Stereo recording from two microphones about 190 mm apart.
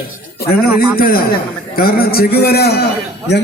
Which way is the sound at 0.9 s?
50° left (ahead or behind).